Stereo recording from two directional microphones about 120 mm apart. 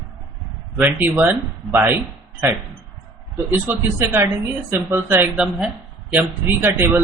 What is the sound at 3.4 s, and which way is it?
Speech, 20° right (ahead or behind).